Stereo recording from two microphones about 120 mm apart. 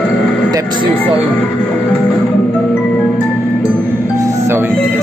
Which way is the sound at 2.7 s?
10° left (ahead or behind).